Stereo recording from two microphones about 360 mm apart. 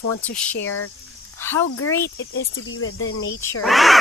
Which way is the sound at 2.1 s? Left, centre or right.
Left.